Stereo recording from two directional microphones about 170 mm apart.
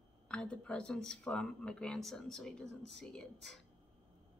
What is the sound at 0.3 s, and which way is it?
Speech, 5° left (ahead or behind).